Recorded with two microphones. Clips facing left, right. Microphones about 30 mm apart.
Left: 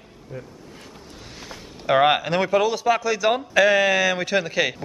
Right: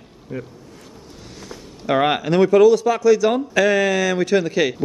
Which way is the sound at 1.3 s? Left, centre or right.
Centre.